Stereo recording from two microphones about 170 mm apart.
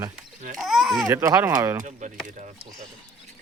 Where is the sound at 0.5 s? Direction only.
Centre (ahead or behind).